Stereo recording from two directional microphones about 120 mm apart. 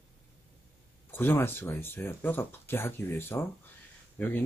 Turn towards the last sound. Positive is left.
turn(degrees=15)  # may be behind; listen again after turning